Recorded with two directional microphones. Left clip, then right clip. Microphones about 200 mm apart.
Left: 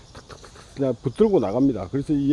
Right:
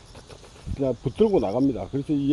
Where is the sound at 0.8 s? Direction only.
20° left (ahead or behind).